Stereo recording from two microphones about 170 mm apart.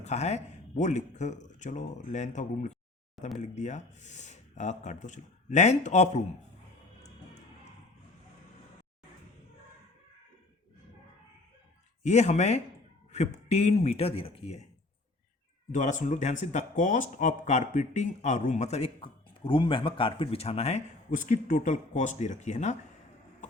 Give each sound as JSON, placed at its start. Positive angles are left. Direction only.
{"t": 0.0, "sound": "speech", "side_deg": 40}
{"t": 7.0, "sound": "music", "side_deg": 85}
{"t": 12.0, "sound": "a man's voice", "side_deg": 40}
{"t": 15.7, "sound": "speech", "side_deg": 45}